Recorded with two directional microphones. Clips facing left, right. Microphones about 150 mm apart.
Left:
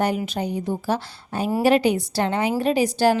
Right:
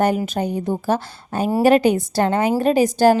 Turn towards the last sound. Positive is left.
turn(degrees=-45)  # may be behind; listen again after turning